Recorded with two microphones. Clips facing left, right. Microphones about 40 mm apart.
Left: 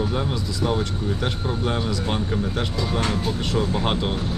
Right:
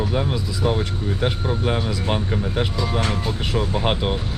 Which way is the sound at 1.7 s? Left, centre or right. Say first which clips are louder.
Right 2 dB; centre.